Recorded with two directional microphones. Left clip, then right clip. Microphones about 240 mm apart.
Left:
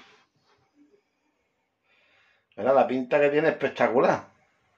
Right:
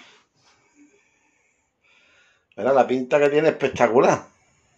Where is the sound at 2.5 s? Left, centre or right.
Centre.